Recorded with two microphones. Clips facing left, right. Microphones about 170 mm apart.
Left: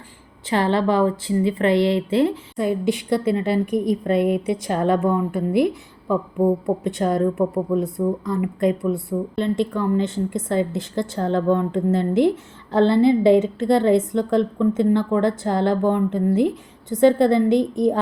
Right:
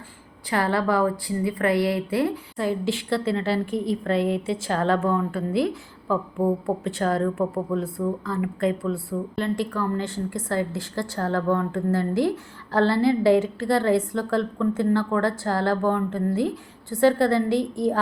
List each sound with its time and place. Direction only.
0.5 s a woman's voice: 25° left (ahead or behind)